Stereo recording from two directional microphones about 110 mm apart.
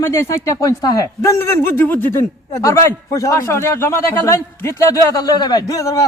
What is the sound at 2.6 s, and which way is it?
A man's voice, 30° left (ahead or behind).